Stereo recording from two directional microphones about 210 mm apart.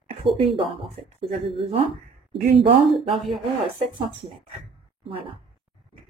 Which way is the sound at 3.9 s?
25° right (ahead or behind).